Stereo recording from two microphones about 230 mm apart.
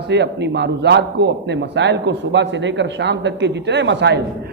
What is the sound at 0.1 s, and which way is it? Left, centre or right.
A man's voice, right.